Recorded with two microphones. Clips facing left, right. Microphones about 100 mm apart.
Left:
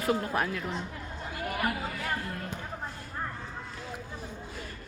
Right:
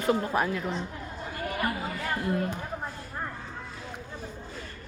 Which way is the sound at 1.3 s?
5° left (ahead or behind).